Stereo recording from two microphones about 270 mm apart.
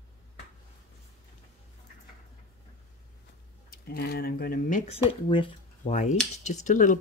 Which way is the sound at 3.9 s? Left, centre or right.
Left.